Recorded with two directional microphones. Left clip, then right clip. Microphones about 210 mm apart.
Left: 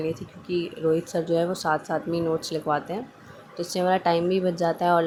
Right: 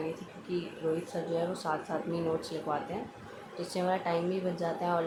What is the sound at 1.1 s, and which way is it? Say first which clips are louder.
A woman's voice: left 9 dB; 30° left (ahead or behind).